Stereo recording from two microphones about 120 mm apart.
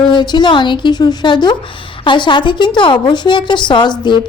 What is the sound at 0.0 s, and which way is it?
A woman's voice, 40° left (ahead or behind).